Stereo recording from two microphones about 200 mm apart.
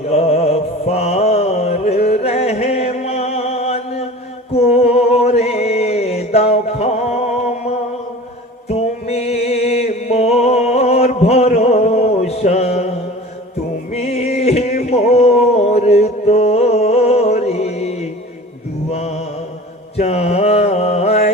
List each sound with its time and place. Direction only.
0.1 s music: 30° left (ahead or behind)
4.5 s a sound: 30° left (ahead or behind)
8.7 s music: 30° left (ahead or behind)
13.9 s music: 35° left (ahead or behind)
20.0 s mantra: 30° left (ahead or behind)